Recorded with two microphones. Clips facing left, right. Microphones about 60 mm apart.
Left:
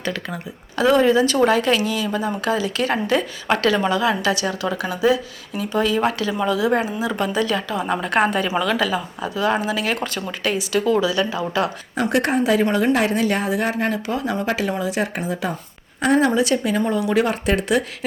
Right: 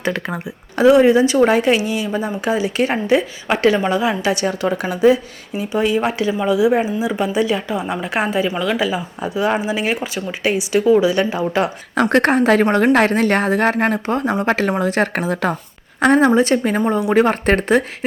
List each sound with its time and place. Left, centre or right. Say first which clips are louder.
0.0 s a woman's voice: right 5 dB; right
0.9 s a woman's voice: right 5 dB; centre
3.2 s a woman's voice: right 2 dB; centre
3.8 s a woman's voice: right 2 dB; right; by 8.7 s centre
8.7 s a woman's voice: right 1 dB; centre
11.1 s a woman's voice: right 4 dB; right
11.9 s speech: right 5 dB; right
16.1 s a woman's voice: right 3 dB; right